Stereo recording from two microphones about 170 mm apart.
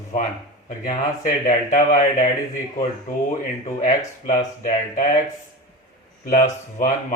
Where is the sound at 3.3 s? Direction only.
50° left (ahead or behind).